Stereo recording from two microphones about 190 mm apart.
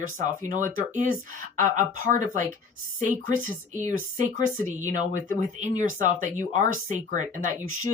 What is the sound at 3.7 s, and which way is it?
Speech, 40° right (ahead or behind).